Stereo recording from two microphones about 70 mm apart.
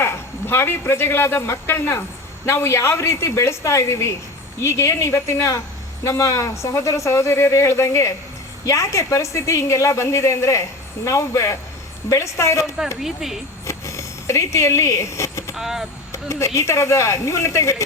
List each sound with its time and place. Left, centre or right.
0.0 s a man's voice: left
13.0 s speech: centre
13.7 s speech: left
15.5 s speech: centre
16.1 s speech: left